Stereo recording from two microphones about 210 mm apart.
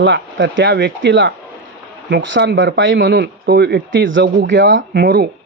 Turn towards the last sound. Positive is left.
turn(degrees=-50)  # may be behind; listen again after turning